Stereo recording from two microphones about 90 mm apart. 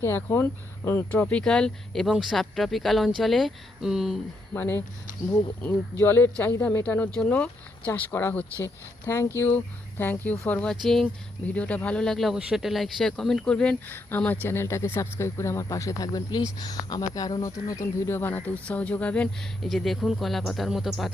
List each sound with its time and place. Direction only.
0.0 s speech: 30° left (ahead or behind)
1.1 s speech: 15° left (ahead or behind); by 4.2 s 5° right (ahead or behind)
4.5 s speech: 25° left (ahead or behind)
6.0 s speech: 25° left (ahead or behind)
8.6 s speech: 30° left (ahead or behind)
10.0 s speech: 20° left (ahead or behind)
10.8 s speech: 5° left (ahead or behind)
11.5 s speech: 15° left (ahead or behind)
13.8 s speech: 20° left (ahead or behind)
19.6 s speech: centre (ahead or behind)